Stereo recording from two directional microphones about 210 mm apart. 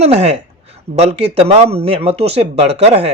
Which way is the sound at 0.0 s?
30° right (ahead or behind).